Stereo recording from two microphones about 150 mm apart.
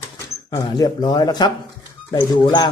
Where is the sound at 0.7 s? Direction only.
25° left (ahead or behind).